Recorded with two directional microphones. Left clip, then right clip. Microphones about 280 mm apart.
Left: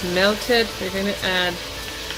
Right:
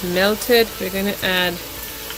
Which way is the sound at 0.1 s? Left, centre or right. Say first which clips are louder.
Right 2 dB; right.